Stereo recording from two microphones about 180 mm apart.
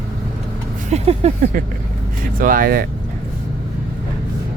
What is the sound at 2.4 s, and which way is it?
Speech, 50° right (ahead or behind).